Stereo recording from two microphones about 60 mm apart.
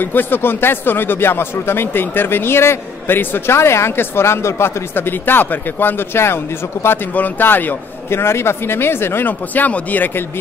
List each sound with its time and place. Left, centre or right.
0.0 s speech: left
7.2 s speech: left